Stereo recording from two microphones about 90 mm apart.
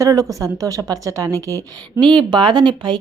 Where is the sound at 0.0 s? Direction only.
40° right (ahead or behind).